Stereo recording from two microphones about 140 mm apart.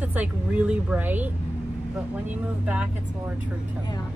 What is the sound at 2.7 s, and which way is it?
Speech, 10° right (ahead or behind).